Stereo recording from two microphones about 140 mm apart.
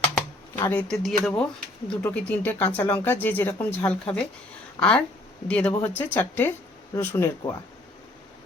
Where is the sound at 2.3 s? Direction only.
15° left (ahead or behind).